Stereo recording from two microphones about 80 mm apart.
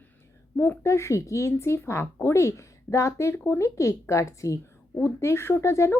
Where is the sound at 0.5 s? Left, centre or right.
Left.